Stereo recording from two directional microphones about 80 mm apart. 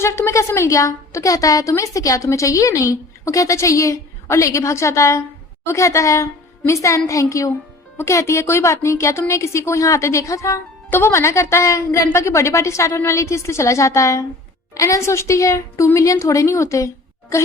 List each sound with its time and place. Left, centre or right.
0.0 s a woman's voice: left